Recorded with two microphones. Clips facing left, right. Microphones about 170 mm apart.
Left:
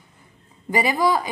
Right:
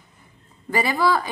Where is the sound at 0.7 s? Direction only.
15° left (ahead or behind).